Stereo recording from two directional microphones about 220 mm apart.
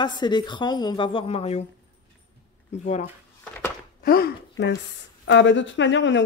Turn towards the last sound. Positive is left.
turn(degrees=55)  # may be behind; listen again after turning